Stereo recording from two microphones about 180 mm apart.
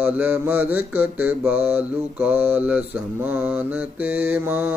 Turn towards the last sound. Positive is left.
turn(degrees=-10)  # may be behind; listen again after turning